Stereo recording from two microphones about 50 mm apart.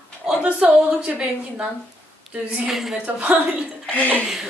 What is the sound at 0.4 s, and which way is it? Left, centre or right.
A woman's voice, right.